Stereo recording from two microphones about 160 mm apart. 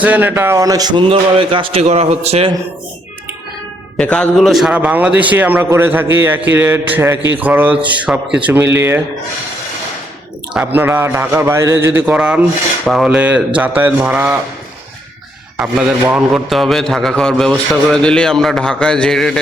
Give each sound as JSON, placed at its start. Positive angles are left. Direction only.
{"t": 0.0, "sound": "speech", "side_deg": -10}
{"t": 3.9, "sound": "a man's voice", "side_deg": 5}
{"t": 10.5, "sound": "a man's voice", "side_deg": -10}
{"t": 15.5, "sound": "a man's voice", "side_deg": -10}